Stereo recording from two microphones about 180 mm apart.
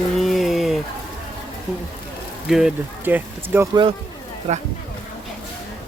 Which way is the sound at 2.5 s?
5° right (ahead or behind).